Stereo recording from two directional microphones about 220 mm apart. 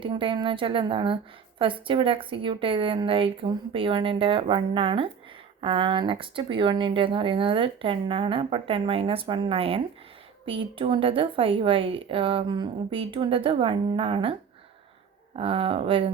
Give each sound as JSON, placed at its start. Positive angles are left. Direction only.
{"t": 0.0, "sound": "a woman's voice", "side_deg": -25}
{"t": 15.4, "sound": "a woman's voice", "side_deg": -25}